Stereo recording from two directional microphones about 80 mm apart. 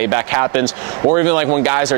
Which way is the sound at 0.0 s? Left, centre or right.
Right.